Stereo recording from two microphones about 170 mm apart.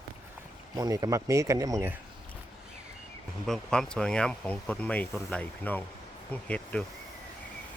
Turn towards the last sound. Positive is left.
turn(degrees=5)  # may be behind; listen again after turning